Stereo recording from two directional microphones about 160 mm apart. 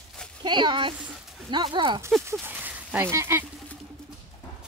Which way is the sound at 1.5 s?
30° right (ahead or behind).